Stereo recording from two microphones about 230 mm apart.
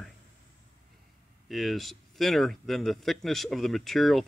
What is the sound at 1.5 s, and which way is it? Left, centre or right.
Speech, centre.